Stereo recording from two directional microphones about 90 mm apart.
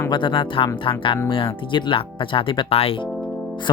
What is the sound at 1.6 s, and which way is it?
Speech, 65° left (ahead or behind).